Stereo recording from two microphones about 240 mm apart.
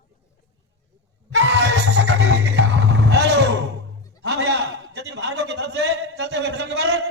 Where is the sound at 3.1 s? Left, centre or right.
Right.